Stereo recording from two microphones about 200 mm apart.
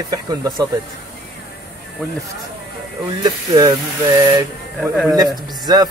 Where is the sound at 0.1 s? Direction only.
15° right (ahead or behind).